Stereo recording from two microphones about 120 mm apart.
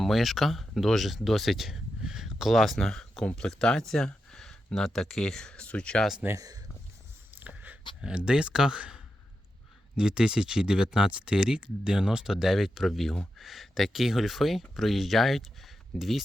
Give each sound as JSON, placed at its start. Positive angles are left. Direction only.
{"t": 0.0, "sound": "speech", "side_deg": 0}
{"t": 6.2, "sound": "speech", "side_deg": -30}
{"t": 7.3, "sound": "a sound", "side_deg": -15}
{"t": 8.0, "sound": "speech", "side_deg": -10}